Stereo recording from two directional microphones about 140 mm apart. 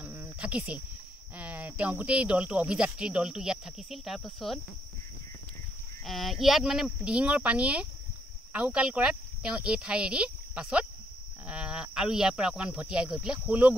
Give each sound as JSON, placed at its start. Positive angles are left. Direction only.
{"t": 0.0, "sound": "cricket", "side_deg": -10}
{"t": 1.3, "sound": "speech", "side_deg": -10}
{"t": 6.0, "sound": "speech", "side_deg": 0}